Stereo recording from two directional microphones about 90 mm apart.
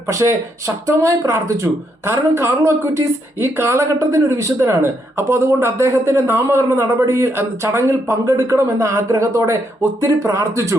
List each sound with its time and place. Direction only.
0.1 s a woman's voice: 35° right (ahead or behind)